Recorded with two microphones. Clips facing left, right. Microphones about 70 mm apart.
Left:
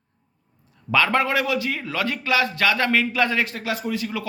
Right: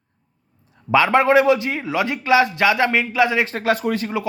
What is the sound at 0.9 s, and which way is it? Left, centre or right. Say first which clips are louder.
A man's voice: right 6 dB; centre.